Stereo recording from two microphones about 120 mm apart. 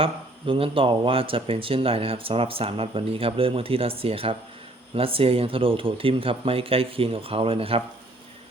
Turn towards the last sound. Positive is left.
turn(degrees=-50)  # may be behind; listen again after turning